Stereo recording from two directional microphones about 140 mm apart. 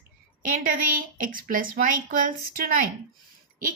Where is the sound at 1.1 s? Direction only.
80° right.